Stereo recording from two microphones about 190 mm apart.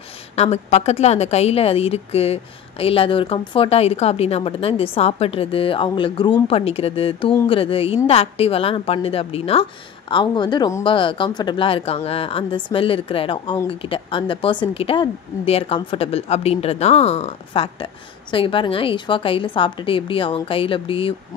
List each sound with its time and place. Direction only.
0.4 s a woman's voice: 35° left (ahead or behind)